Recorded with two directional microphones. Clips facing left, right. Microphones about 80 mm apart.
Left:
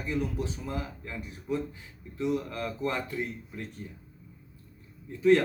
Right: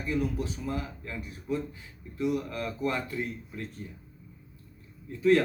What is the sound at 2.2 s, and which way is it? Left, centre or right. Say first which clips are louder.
Speech: even; left.